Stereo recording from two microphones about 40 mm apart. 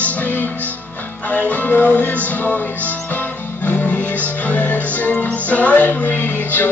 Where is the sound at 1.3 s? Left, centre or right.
Left.